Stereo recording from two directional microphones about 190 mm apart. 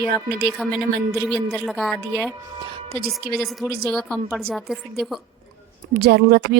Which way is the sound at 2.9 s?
55° right (ahead or behind).